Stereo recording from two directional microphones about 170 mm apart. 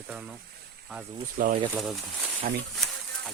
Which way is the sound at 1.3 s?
55° right (ahead or behind).